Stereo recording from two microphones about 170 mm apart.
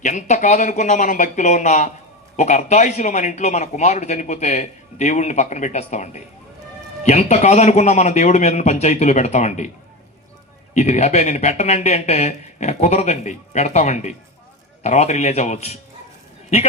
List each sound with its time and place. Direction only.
0.0 s a man's voice: 45° left (ahead or behind)
10.8 s speech: 40° left (ahead or behind)